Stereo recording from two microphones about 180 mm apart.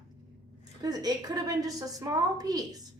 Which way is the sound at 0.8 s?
20° right (ahead or behind).